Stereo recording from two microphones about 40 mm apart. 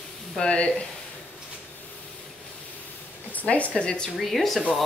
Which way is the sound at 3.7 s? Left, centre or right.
Left.